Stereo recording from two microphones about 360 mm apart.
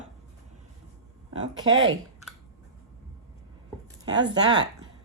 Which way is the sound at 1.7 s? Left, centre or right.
Right.